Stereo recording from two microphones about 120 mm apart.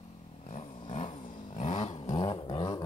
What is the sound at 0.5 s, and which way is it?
Vehicle, 90° left.